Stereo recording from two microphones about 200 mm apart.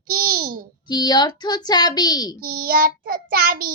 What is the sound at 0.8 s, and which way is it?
A child's voice, 20° left (ahead or behind).